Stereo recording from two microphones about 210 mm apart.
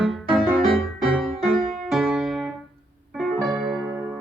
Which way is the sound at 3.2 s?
Centre (ahead or behind).